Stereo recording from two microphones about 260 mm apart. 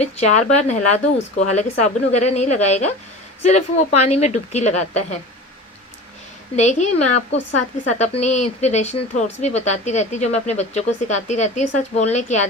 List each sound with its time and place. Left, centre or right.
0.0 s a woman's voice: left
6.6 s a woman's voice: left